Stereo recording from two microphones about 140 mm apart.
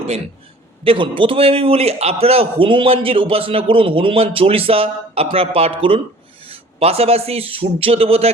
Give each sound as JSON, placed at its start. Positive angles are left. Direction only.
{"t": 0.9, "sound": "a man's voice", "side_deg": -35}